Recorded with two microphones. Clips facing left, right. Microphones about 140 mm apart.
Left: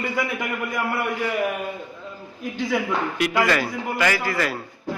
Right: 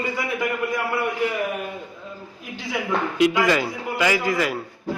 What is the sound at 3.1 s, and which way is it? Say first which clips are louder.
A man's voice: right 3 dB; 20° right (ahead or behind).